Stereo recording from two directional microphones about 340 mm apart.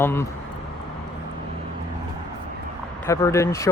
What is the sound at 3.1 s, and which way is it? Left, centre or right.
Speech, centre.